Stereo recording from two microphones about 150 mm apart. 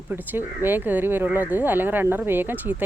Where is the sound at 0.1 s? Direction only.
10° right (ahead or behind).